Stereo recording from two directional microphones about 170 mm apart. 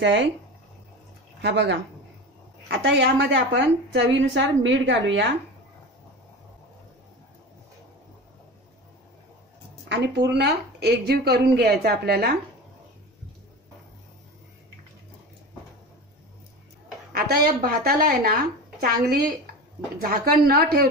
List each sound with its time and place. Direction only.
0.0 s a woman's voice: 90° right
1.4 s a woman's voice: 90° right
2.8 s a woman's voice: 85° right
9.8 s speech: 85° right
17.1 s speech: 60° right (ahead or behind)